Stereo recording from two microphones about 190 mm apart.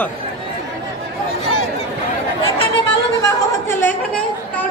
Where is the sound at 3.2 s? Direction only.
15° left (ahead or behind).